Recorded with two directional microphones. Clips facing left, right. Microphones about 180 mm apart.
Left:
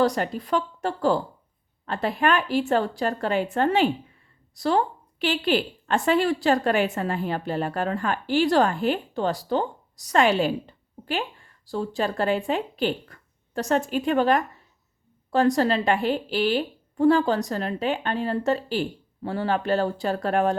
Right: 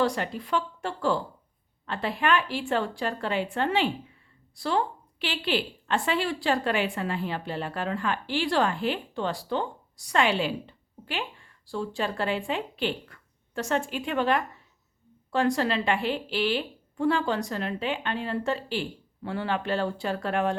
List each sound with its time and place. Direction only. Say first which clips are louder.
0.0 s a woman's voice: left 4 dB; 40° left (ahead or behind)